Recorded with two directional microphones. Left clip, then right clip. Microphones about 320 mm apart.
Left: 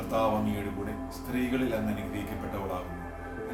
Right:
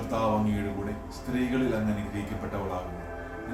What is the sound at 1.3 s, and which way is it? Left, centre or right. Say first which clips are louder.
Speech: right 2 dB; centre.